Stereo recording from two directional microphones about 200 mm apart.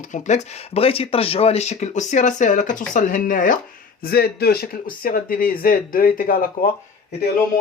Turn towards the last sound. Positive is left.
turn(degrees=45)  # may be behind; listen again after turning